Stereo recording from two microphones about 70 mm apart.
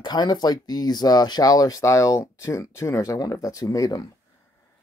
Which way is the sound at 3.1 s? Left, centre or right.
Left.